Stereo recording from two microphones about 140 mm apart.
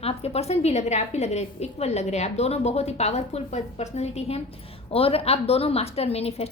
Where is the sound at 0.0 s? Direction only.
45° left (ahead or behind).